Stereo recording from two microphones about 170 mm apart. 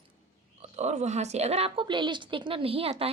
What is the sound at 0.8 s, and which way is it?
A woman's voice, 40° right (ahead or behind).